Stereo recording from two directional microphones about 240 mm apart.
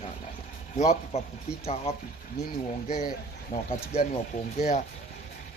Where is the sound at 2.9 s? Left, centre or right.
Left.